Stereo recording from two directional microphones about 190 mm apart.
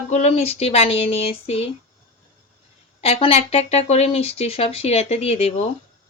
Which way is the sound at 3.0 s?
30° left (ahead or behind).